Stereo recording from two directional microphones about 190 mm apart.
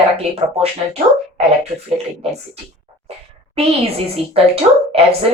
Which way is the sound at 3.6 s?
30° right (ahead or behind).